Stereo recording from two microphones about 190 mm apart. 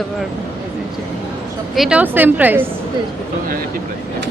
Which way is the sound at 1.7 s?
5° right (ahead or behind).